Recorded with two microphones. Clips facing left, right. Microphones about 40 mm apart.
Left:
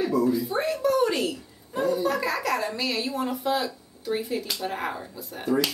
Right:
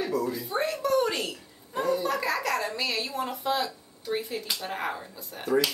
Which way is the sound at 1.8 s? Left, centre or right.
Centre.